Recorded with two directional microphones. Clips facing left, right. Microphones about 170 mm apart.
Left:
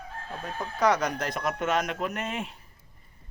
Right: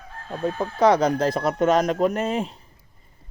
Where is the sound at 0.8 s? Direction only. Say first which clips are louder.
Right 7 dB; 30° right (ahead or behind).